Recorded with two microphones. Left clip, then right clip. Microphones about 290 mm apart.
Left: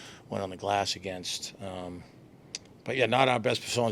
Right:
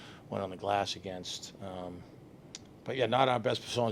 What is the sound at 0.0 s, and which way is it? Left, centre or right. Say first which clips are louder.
A man's voice: left 2 dB; left.